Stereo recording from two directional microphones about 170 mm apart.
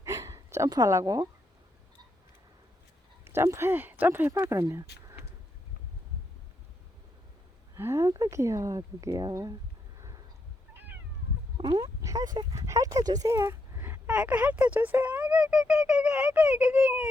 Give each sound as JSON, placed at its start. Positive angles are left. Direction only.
{"t": 0.0, "sound": "hiccup", "side_deg": -15}
{"t": 3.2, "sound": "speech", "side_deg": -15}
{"t": 7.8, "sound": "speech", "side_deg": -15}
{"t": 11.5, "sound": "speech", "side_deg": -25}